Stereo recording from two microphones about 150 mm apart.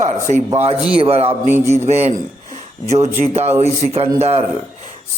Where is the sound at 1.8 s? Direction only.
45° right (ahead or behind).